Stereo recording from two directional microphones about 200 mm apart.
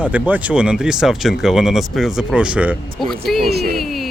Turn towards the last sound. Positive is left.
turn(degrees=0)  # may be behind; listen again after turning